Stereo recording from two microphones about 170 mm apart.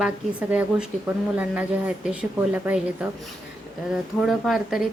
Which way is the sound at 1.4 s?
10° right (ahead or behind).